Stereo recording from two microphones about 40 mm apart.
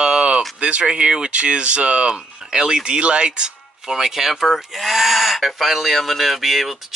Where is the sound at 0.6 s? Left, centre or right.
Right.